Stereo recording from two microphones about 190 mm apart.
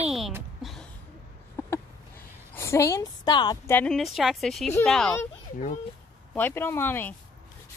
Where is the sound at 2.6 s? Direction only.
15° left (ahead or behind).